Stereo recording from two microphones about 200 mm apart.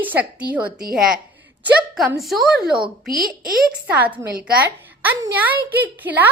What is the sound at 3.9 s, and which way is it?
A woman's voice, 10° right (ahead or behind).